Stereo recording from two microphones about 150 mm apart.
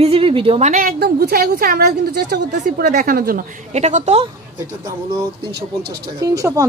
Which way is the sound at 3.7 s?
50° right (ahead or behind).